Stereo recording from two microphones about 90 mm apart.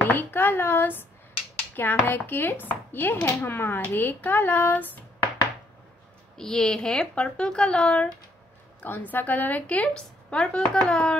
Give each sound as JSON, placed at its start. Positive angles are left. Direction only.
{"t": 0.1, "sound": "speech", "side_deg": 20}
{"t": 6.3, "sound": "speech", "side_deg": 5}
{"t": 9.1, "sound": "speech", "side_deg": 20}